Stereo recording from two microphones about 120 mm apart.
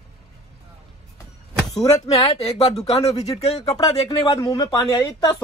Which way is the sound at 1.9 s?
60° left (ahead or behind).